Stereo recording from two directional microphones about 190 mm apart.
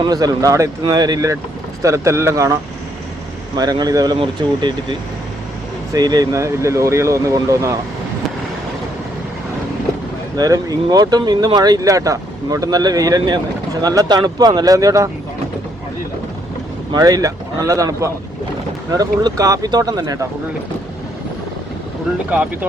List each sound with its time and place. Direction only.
0.0 s speech: 20° right (ahead or behind)
10.3 s speech: 20° right (ahead or behind)
16.9 s speech: 20° right (ahead or behind)